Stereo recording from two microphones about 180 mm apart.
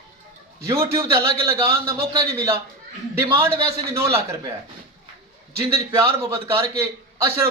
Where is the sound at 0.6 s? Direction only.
15° right (ahead or behind).